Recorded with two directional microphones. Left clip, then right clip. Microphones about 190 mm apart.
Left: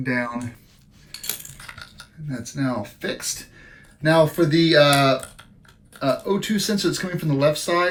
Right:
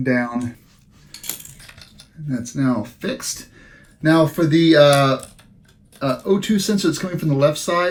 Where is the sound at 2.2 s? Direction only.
20° right (ahead or behind).